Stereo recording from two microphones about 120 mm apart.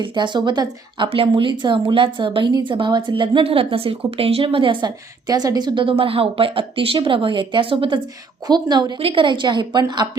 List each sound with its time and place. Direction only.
0.0 s a woman's voice: 40° right (ahead or behind)
9.0 s a woman's voice: 50° right (ahead or behind)